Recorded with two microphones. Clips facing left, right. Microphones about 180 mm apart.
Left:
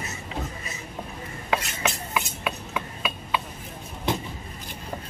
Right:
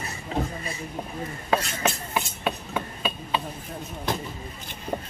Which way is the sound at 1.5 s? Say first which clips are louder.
Right 2 dB; 35° right (ahead or behind).